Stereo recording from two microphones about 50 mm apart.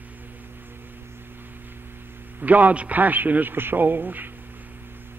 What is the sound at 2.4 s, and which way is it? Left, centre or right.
A man's voice, right.